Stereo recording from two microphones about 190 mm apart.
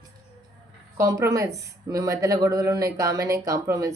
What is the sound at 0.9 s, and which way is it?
A woman's voice, 15° right (ahead or behind).